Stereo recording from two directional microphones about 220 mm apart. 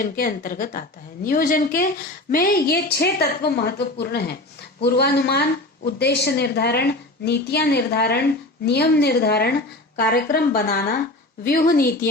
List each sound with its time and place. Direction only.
0.0 s a woman's voice: 40° left (ahead or behind)